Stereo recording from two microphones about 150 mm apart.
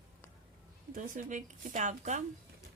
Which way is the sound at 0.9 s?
60° right (ahead or behind).